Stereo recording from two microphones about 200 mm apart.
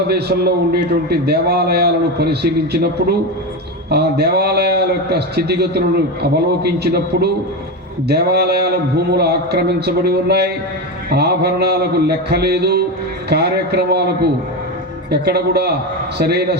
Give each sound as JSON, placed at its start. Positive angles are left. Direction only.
{"t": 0.1, "sound": "a man's voice", "side_deg": -55}